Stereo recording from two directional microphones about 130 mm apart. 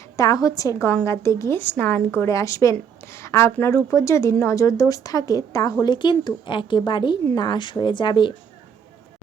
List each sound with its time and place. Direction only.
0.2 s speech: 30° left (ahead or behind)
5.8 s a woman's voice: 35° left (ahead or behind)